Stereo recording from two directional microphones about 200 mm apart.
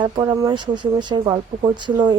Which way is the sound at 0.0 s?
20° right (ahead or behind).